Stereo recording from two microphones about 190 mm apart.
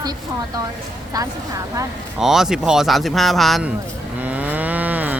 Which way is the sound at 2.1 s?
Centre (ahead or behind).